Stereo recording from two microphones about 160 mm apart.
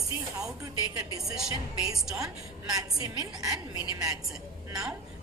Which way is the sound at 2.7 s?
20° right (ahead or behind).